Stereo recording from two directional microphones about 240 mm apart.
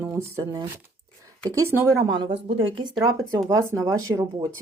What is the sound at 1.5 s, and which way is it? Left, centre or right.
Speech, centre.